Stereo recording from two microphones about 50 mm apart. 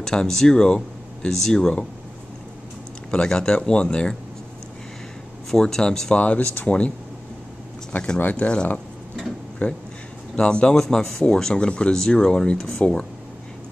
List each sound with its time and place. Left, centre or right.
0.0 s speech: centre
3.1 s speech: centre
5.5 s speech: centre
6.2 s speech: left
8.2 s speech: left
9.6 s speech: left
10.7 s speech: centre